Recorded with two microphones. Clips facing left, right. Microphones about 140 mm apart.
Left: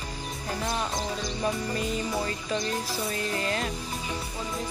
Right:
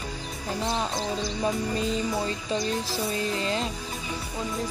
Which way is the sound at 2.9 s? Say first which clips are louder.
Right 2 dB; 25° right (ahead or behind).